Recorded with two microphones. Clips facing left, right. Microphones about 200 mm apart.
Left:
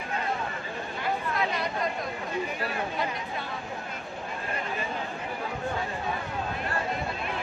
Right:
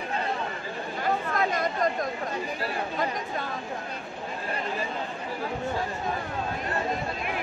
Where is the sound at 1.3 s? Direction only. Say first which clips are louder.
Right 3 dB; 45° right (ahead or behind).